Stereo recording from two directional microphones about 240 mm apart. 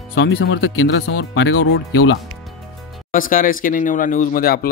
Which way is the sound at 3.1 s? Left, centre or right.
Left.